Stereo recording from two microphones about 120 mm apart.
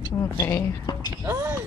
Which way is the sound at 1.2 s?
20° right (ahead or behind).